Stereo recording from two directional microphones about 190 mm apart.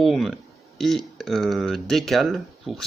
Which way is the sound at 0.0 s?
Centre (ahead or behind).